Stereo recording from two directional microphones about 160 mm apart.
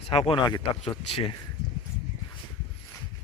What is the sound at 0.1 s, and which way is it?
Speech, 35° left (ahead or behind).